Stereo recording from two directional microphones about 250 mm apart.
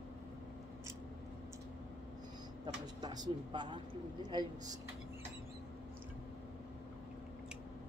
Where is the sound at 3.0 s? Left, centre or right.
Centre.